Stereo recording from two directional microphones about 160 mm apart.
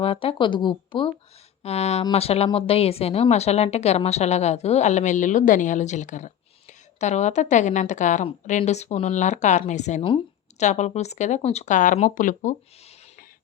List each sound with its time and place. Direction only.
0.0 s speech: 35° left (ahead or behind); by 12.5 s 55° left (ahead or behind)